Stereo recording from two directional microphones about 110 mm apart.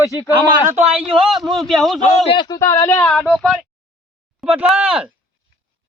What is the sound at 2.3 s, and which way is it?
Speech, 45° left (ahead or behind).